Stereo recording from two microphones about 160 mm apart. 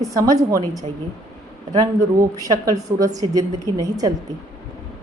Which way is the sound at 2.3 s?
20° right (ahead or behind).